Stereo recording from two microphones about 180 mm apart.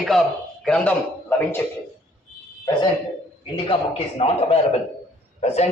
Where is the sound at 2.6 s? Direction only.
25° left (ahead or behind).